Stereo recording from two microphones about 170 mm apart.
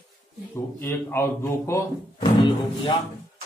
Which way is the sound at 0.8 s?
15° left (ahead or behind).